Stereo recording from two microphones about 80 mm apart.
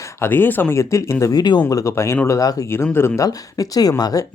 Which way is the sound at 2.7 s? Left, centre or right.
Left.